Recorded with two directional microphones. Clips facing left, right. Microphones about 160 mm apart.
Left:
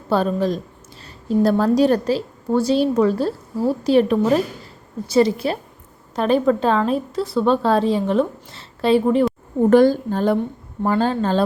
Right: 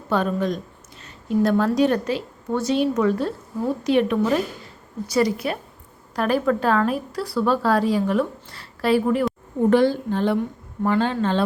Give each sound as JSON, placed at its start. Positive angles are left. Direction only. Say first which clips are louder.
{"t": 0.1, "sound": "a woman's voice", "louder": "left 3 dB", "side_deg": 35}
{"t": 9.6, "sound": "a woman's voice", "louder": "left 4 dB", "side_deg": 45}